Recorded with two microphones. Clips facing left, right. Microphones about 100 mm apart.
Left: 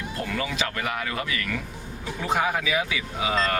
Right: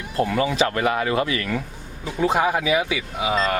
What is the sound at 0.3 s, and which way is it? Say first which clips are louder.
Speech: right 6 dB; 25° right (ahead or behind).